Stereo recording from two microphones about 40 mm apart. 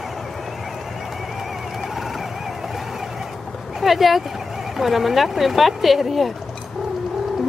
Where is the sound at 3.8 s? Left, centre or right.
Centre.